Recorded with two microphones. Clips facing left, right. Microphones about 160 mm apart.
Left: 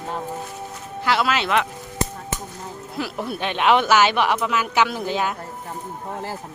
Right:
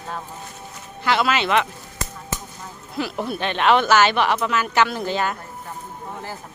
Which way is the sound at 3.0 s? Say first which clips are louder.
Right 2 dB; 5° left (ahead or behind).